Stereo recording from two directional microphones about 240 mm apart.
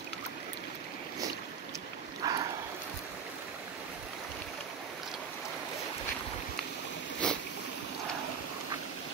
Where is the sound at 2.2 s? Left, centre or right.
Centre.